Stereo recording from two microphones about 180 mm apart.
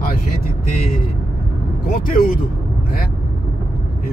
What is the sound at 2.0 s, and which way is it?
Speech, 50° left (ahead or behind).